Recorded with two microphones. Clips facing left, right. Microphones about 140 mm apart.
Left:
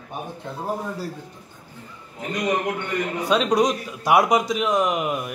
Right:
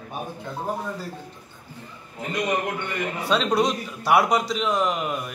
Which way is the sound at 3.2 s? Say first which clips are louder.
Left 2 dB; 15° left (ahead or behind).